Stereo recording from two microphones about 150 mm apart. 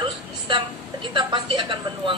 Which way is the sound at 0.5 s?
30° right (ahead or behind).